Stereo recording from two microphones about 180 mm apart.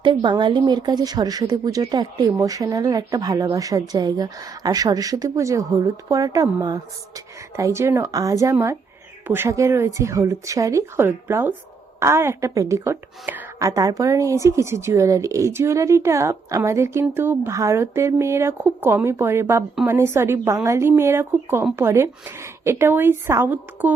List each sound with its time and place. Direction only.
0.0 s speech: 25° right (ahead or behind); by 23.9 s 10° right (ahead or behind)